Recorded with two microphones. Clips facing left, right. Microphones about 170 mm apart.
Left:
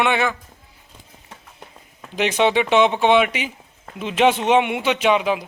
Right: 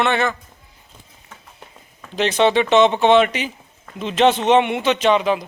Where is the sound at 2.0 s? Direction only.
10° left (ahead or behind).